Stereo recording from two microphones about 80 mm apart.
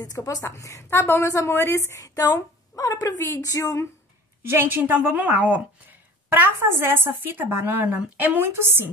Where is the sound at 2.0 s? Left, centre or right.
Left.